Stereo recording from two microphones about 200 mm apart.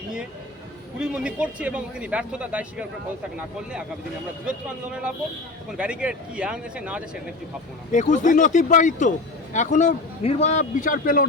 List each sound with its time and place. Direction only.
0.9 s a man's voice: 5° right (ahead or behind)
7.9 s a man's voice: 40° left (ahead or behind)